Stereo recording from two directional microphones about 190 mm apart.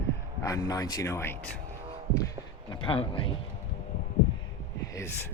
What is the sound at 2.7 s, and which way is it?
Speech, 25° left (ahead or behind).